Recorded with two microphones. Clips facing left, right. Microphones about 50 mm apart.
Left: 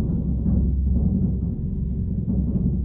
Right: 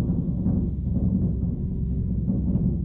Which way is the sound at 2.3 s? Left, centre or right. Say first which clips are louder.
Left 1 dB; centre.